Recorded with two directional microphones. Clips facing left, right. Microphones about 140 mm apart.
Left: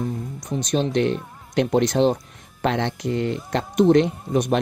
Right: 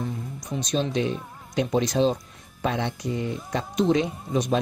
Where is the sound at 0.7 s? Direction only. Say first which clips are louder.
Left 4 dB; 60° left (ahead or behind).